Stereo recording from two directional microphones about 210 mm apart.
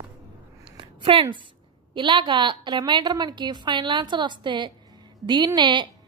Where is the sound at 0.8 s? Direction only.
25° right (ahead or behind).